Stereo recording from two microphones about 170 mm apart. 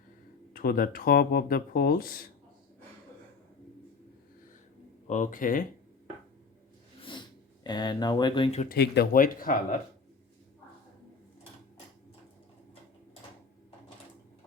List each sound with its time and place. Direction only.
0.5 s speech: 60° left (ahead or behind)
5.0 s speech: 50° left (ahead or behind)
7.0 s a sound: 25° left (ahead or behind)
8.7 s speech: 65° left (ahead or behind)